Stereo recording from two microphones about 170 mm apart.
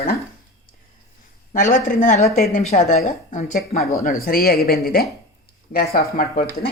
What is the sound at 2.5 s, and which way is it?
A woman's voice, 40° left (ahead or behind).